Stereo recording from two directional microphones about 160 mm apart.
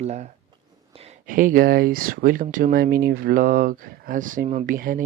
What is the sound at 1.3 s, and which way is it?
Speech, 60° right (ahead or behind).